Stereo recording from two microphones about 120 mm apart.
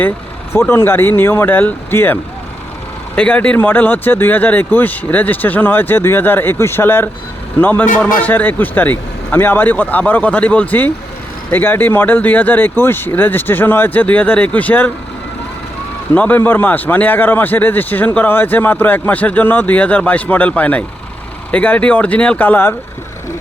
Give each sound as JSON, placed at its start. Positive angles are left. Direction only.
{"t": 0.5, "sound": "speech", "side_deg": 20}
{"t": 3.2, "sound": "a man's voice", "side_deg": 10}
{"t": 16.1, "sound": "a man's voice", "side_deg": 15}